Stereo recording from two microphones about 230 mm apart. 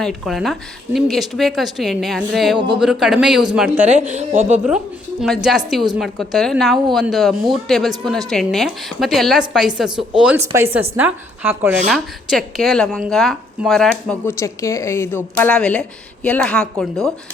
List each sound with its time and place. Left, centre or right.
0.0 s a woman's voice: centre
4.1 s a woman's voice: right
5.2 s a woman's voice: centre